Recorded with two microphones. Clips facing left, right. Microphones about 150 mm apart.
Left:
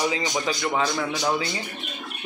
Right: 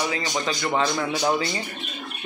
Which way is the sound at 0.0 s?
10° left (ahead or behind).